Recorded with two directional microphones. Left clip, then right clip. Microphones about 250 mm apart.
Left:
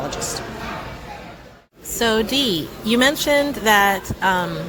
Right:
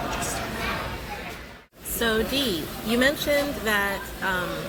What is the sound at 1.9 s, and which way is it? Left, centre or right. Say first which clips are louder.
A woman's voice: left 6 dB; left.